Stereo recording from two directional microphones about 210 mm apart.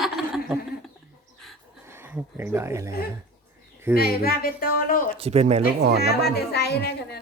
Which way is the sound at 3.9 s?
45° left (ahead or behind).